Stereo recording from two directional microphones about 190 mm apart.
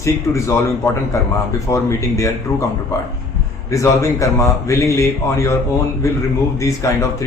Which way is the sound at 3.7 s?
15° left (ahead or behind).